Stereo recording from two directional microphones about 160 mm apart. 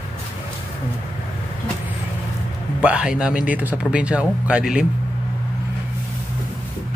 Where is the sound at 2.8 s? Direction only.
5° right (ahead or behind).